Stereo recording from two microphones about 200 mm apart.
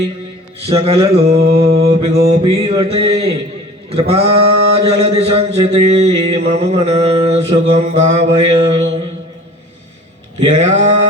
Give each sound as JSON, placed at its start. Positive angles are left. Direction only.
{"t": 0.8, "sound": "mantra", "side_deg": -30}
{"t": 1.3, "sound": "mantra", "side_deg": -50}
{"t": 2.3, "sound": "mantra", "side_deg": -30}
{"t": 10.4, "sound": "mantra", "side_deg": -35}